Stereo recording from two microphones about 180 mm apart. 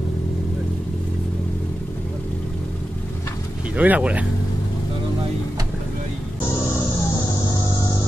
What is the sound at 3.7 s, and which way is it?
Speech, 10° right (ahead or behind).